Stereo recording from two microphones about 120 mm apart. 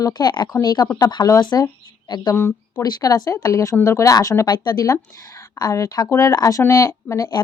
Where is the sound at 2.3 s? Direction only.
20° left (ahead or behind).